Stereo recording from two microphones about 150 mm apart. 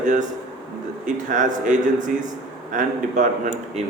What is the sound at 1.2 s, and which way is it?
A man's voice, 60° right (ahead or behind).